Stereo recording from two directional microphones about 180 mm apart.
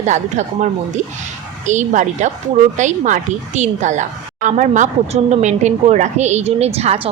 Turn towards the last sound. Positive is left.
turn(degrees=-35)  # may be behind; listen again after turning